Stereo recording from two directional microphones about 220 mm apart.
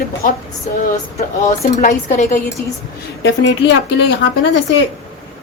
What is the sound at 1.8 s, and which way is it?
Speech, 35° left (ahead or behind).